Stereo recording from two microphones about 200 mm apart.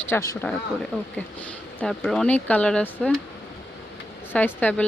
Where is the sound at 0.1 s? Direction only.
15° left (ahead or behind).